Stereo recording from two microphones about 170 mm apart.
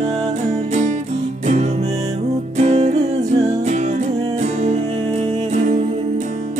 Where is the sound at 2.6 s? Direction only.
40° right (ahead or behind).